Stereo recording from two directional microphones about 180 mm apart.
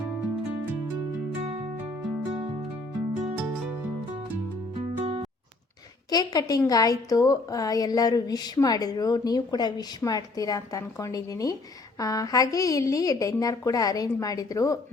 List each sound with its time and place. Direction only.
6.1 s a woman's voice: 20° left (ahead or behind)